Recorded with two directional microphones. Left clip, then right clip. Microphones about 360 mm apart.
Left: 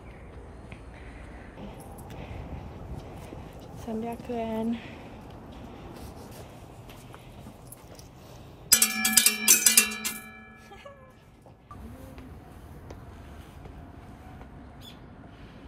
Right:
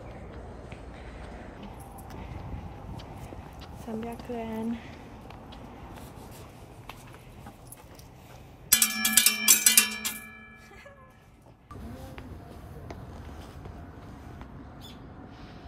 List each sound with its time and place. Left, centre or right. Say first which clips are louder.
3.8 s speech: left 3 dB; centre
8.6 s music: left 2 dB; centre